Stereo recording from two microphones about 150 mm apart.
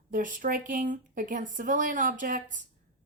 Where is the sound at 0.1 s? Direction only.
60° right (ahead or behind).